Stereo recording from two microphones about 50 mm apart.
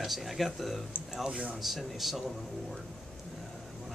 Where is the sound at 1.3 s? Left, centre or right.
Right.